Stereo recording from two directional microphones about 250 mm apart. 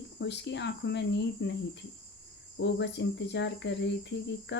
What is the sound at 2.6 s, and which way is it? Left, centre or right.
Speech, left.